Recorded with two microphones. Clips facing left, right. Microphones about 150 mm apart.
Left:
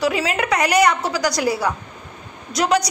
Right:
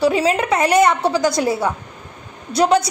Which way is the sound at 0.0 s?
30° right (ahead or behind).